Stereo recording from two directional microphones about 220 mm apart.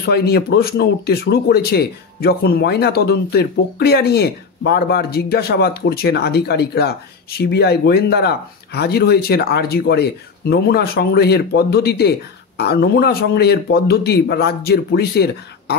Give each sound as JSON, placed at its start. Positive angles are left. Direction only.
{"t": 0.0, "sound": "speech", "side_deg": 45}